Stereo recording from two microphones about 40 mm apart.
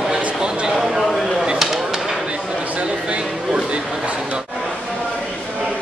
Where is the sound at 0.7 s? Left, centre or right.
Centre.